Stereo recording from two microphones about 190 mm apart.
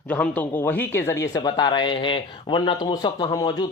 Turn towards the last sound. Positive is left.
turn(degrees=20)  # may be behind; listen again after turning